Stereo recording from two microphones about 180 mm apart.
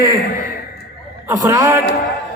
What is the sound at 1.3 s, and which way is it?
Speech, 20° right (ahead or behind).